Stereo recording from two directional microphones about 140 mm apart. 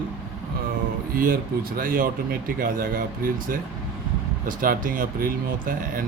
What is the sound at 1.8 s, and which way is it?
Speech, 80° right.